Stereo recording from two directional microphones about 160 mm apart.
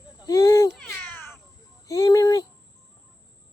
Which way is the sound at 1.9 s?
20° left (ahead or behind).